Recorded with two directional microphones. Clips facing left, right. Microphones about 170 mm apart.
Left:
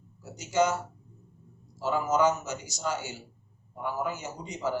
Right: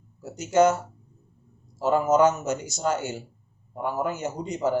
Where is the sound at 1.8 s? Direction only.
50° right (ahead or behind).